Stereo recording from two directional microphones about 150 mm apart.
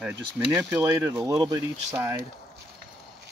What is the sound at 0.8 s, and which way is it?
Speech, 20° right (ahead or behind).